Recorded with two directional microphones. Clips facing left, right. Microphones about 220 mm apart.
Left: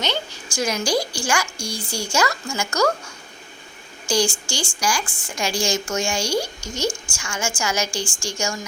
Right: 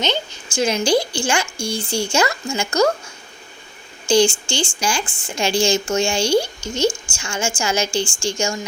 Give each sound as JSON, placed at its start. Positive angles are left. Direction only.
{"t": 0.0, "sound": "speech", "side_deg": -20}
{"t": 4.1, "sound": "speech", "side_deg": -25}